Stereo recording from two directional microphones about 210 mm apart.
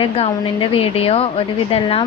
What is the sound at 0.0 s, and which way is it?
A woman's voice, 25° left (ahead or behind).